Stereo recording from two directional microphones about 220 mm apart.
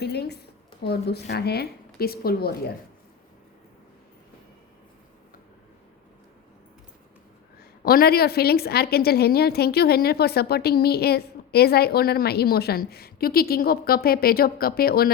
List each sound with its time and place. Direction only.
0.0 s a sound: 50° left (ahead or behind)
0.8 s a woman's voice: 45° left (ahead or behind)
7.9 s a woman's voice: 45° left (ahead or behind)